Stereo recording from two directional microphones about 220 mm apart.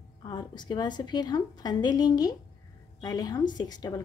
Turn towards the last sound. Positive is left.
turn(degrees=20)  # may be behind; listen again after turning